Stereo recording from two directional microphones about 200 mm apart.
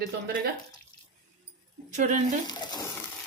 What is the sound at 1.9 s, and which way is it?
Speech, 35° right (ahead or behind).